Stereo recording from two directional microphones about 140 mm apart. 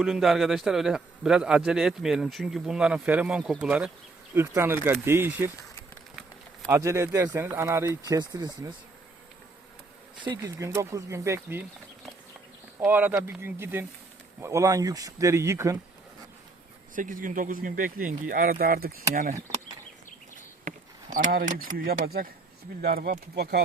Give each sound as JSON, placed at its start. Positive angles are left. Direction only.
{"t": 0.0, "sound": "speech", "side_deg": -5}
{"t": 6.7, "sound": "speech", "side_deg": -20}
{"t": 10.2, "sound": "speech", "side_deg": -35}
{"t": 10.6, "sound": "speech", "side_deg": -20}
{"t": 12.8, "sound": "speech", "side_deg": -15}
{"t": 16.9, "sound": "speech", "side_deg": -70}
{"t": 20.7, "sound": "speech", "side_deg": -70}